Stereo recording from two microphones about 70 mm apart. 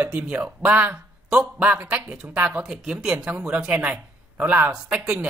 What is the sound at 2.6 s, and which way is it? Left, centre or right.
Speech, centre.